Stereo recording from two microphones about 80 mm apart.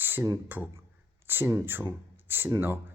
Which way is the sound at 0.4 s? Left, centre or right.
Right.